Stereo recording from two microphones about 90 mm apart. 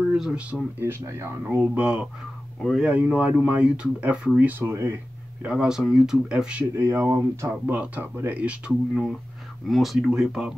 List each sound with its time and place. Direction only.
0.1 s speech: 10° right (ahead or behind)
0.7 s speech: 25° right (ahead or behind)
1.8 s speech: 15° right (ahead or behind)
2.6 s speech: centre (ahead or behind)
2.9 s speech: 15° right (ahead or behind)
5.4 s speech: 10° right (ahead or behind)
6.7 s speech: 30° right (ahead or behind)
7.6 s speech: 15° right (ahead or behind)